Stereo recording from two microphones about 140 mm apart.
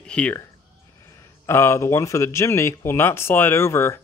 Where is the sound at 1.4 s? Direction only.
20° left (ahead or behind).